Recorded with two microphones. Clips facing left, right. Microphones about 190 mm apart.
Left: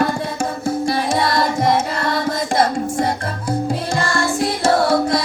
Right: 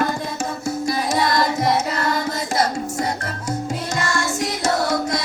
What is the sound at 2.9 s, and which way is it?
Music, 30° left (ahead or behind).